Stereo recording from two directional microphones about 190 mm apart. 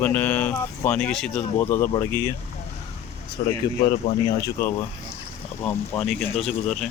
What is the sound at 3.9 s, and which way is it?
Speech, 30° left (ahead or behind).